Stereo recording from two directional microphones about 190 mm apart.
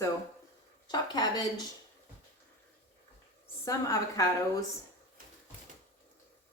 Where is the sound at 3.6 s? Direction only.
20° left (ahead or behind).